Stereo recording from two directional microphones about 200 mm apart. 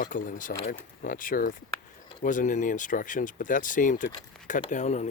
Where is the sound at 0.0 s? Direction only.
40° left (ahead or behind).